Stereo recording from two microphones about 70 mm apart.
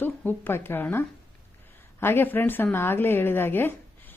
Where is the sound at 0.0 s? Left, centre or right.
Left.